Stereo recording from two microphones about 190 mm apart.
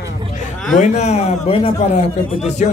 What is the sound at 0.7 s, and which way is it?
Speech, 40° left (ahead or behind).